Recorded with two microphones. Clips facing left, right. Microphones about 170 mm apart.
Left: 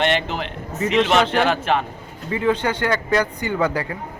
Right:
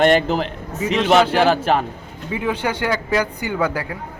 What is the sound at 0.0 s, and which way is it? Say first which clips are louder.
Speech: right 6 dB; 40° right (ahead or behind).